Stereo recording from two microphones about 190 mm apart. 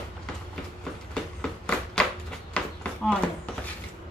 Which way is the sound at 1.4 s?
5° left (ahead or behind).